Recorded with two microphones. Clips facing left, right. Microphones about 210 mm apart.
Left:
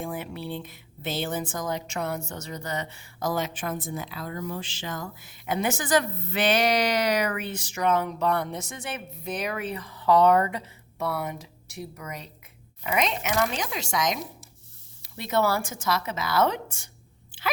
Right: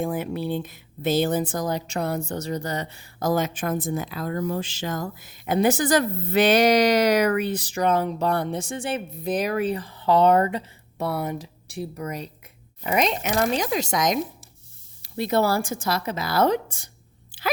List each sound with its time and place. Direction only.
0.0 s speech: 40° right (ahead or behind)